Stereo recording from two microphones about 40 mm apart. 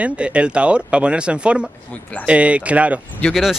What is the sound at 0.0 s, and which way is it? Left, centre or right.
Speech, right.